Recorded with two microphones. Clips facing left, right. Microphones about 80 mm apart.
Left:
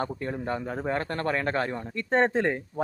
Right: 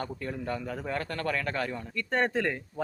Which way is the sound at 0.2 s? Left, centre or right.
Left.